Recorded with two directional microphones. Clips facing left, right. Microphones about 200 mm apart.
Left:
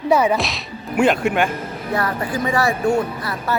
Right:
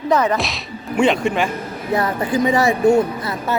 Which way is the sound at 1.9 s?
20° right (ahead or behind).